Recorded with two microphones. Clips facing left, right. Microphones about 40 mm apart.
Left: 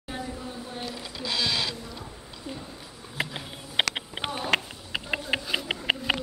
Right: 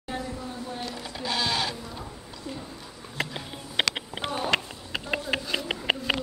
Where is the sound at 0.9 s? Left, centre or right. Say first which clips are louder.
Right 1 dB; right.